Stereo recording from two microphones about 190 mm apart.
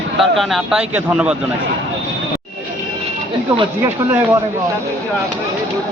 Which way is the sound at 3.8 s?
10° right (ahead or behind).